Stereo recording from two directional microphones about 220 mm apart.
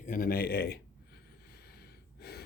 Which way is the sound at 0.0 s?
40° left (ahead or behind).